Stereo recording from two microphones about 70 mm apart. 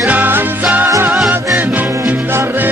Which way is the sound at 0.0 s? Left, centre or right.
Right.